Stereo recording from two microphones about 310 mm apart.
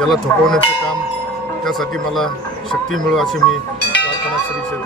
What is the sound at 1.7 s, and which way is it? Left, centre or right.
Speech, centre.